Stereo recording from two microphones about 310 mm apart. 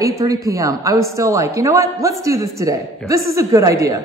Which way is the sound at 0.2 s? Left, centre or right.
Centre.